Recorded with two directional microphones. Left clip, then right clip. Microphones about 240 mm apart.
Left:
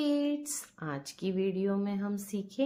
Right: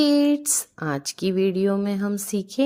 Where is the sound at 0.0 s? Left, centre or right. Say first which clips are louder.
Right 11 dB; right.